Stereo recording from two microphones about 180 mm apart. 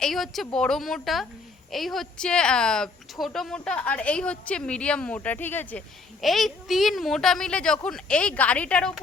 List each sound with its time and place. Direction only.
0.0 s a woman's voice: centre (ahead or behind)
6.2 s a woman's voice: centre (ahead or behind)